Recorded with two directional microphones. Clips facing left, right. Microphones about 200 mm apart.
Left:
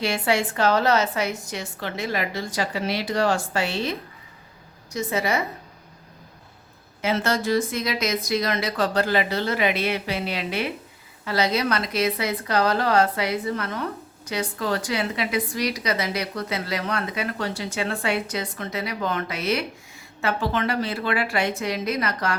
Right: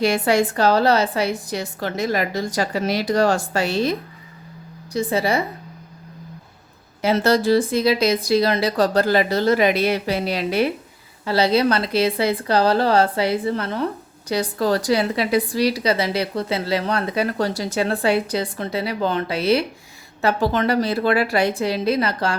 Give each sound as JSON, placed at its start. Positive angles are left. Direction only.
{"t": 0.0, "sound": "a woman's voice", "side_deg": -45}
{"t": 7.0, "sound": "a woman's voice", "side_deg": -35}